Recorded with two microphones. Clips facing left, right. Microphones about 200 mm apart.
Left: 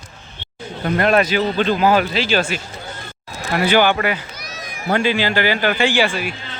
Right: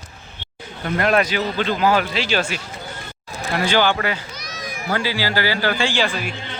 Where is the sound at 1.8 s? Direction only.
45° left (ahead or behind).